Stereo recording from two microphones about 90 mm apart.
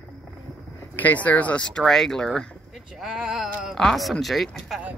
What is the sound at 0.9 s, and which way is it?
Speech, 20° left (ahead or behind).